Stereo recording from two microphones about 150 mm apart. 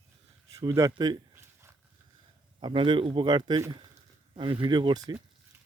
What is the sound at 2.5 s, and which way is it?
Speech, 35° right (ahead or behind).